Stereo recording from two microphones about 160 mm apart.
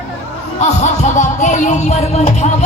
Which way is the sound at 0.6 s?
50° left (ahead or behind).